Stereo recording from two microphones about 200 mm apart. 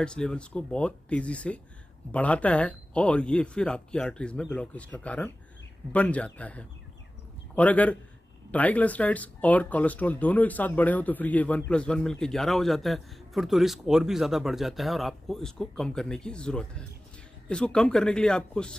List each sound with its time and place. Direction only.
0.0 s speech: 5° left (ahead or behind)